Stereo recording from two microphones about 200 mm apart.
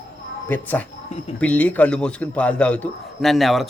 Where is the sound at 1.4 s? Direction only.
5° left (ahead or behind).